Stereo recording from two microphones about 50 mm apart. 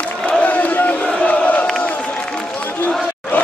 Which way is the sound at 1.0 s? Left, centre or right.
Left.